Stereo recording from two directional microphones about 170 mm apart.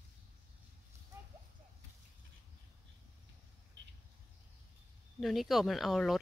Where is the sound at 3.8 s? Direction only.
90° right.